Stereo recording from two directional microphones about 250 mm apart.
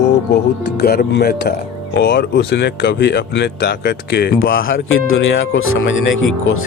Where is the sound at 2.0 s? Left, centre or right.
Left.